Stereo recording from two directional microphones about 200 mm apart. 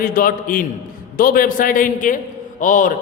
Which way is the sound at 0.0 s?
45° left (ahead or behind).